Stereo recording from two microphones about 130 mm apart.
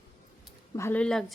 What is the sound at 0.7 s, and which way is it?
Speech, 20° left (ahead or behind).